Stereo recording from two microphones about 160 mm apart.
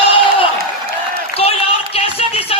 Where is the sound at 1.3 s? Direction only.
40° left (ahead or behind).